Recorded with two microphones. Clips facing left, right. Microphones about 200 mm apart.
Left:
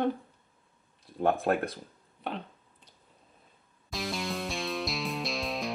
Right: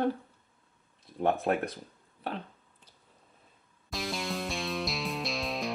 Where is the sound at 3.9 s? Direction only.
Centre (ahead or behind).